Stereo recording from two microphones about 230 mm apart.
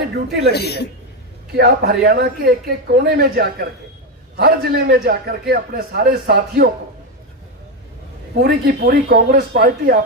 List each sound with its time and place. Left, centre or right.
0.5 s a woman's voice: left
1.5 s a man's voice: right
8.4 s speech: right